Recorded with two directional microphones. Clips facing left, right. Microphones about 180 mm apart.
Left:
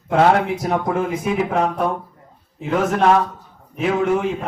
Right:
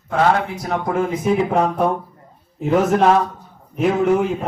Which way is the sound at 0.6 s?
15° left (ahead or behind).